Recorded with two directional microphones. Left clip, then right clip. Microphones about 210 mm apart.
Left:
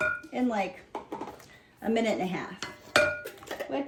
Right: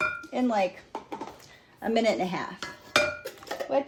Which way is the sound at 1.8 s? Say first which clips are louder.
Right 3 dB; 35° right (ahead or behind).